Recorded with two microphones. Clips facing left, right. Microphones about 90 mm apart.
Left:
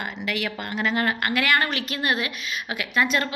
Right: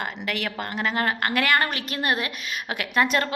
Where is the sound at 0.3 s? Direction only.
45° right (ahead or behind).